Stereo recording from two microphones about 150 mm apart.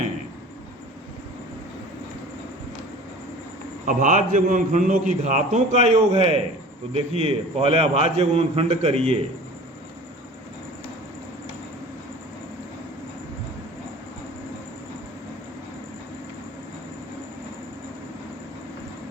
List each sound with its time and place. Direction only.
3.8 s a man's voice: 60° right (ahead or behind)
6.1 s a man's voice: 35° right (ahead or behind)